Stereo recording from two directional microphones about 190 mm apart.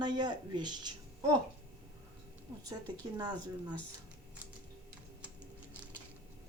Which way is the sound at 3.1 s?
20° right (ahead or behind).